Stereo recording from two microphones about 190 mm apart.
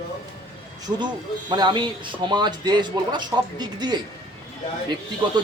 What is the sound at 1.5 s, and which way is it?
A man's voice, 25° right (ahead or behind).